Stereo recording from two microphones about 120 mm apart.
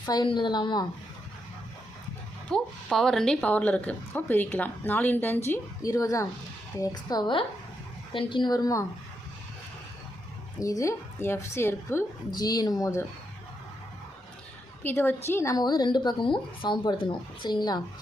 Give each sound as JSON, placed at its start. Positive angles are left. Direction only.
{"t": 0.0, "sound": "speech", "side_deg": 35}
{"t": 2.5, "sound": "a woman's voice", "side_deg": 5}
{"t": 10.6, "sound": "a woman's voice", "side_deg": 25}
{"t": 12.3, "sound": "speech", "side_deg": 35}
{"t": 14.8, "sound": "a woman's voice", "side_deg": 20}
{"t": 15.5, "sound": "speech", "side_deg": 35}